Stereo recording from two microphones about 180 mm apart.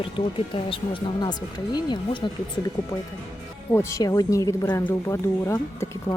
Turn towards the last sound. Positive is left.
turn(degrees=15)  # may be behind; listen again after turning